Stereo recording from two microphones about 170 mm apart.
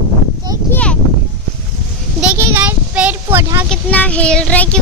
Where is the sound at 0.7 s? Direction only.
5° left (ahead or behind).